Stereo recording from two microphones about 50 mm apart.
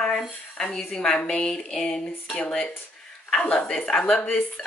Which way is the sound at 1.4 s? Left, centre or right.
Centre.